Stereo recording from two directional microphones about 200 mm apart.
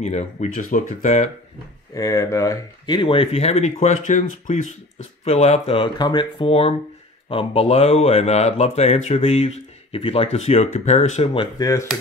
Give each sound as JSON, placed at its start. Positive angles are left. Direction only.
{"t": 0.0, "sound": "speech", "side_deg": 35}
{"t": 2.0, "sound": "speech", "side_deg": 15}
{"t": 11.5, "sound": "speech", "side_deg": 15}